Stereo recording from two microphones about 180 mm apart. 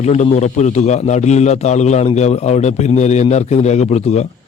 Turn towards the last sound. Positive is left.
turn(degrees=40)  # may be behind; listen again after turning